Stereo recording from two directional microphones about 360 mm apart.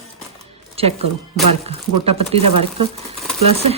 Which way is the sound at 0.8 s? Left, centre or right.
Centre.